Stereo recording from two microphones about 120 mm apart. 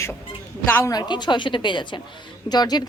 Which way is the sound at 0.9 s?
35° left (ahead or behind).